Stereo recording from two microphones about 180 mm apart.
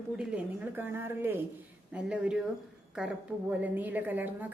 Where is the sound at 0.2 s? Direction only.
5° right (ahead or behind).